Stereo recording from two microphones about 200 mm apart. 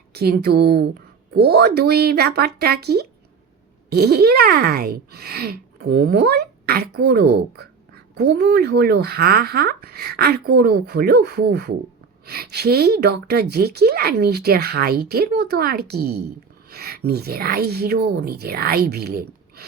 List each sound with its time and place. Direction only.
0.1 s speech: 50° right (ahead or behind)